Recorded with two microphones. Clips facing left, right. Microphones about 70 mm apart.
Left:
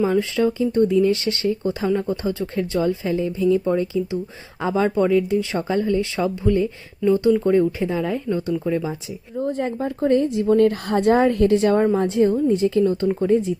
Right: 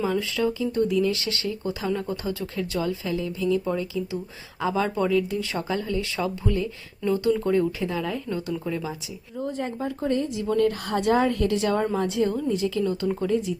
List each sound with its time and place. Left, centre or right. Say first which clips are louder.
0.0 s speech: left 6 dB; left
9.4 s a woman's voice: left 5 dB; left